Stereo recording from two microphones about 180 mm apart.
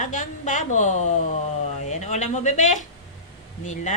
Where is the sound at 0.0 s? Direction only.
45° left (ahead or behind).